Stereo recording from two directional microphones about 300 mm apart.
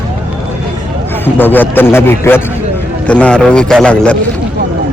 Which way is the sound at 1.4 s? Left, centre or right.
Centre.